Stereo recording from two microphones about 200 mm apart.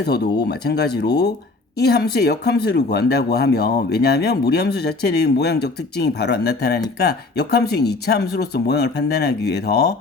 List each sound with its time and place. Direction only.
0.0 s speech: 55° left (ahead or behind)